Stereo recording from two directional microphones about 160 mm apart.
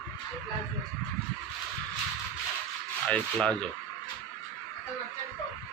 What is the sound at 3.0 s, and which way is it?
Speech, 5° left (ahead or behind).